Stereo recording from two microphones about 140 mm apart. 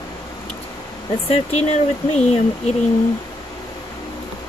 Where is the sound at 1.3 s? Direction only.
50° left (ahead or behind).